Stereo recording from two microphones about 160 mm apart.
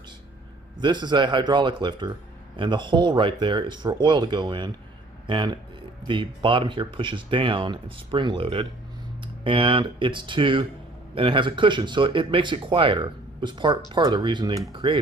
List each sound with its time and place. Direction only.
0.8 s speech: 30° right (ahead or behind)